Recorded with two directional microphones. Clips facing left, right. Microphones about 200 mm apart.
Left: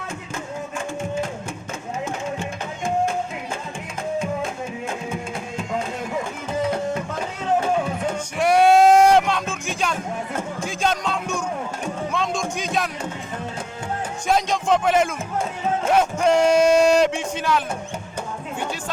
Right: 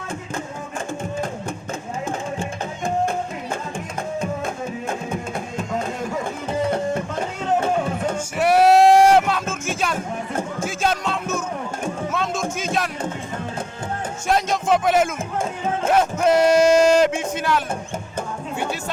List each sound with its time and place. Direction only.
2.8 s music: 55° right (ahead or behind)
8.4 s a sound: 5° right (ahead or behind)
10.7 s music: 5° right (ahead or behind)
14.3 s speech: 5° right (ahead or behind)